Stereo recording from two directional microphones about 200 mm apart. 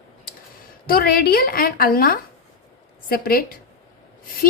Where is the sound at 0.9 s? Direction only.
50° left (ahead or behind).